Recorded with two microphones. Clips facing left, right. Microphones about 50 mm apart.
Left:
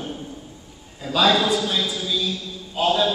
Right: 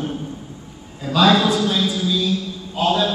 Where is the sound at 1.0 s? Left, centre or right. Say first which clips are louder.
Right 3 dB; centre.